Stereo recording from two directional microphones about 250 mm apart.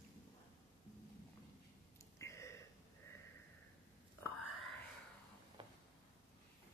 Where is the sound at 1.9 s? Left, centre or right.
Centre.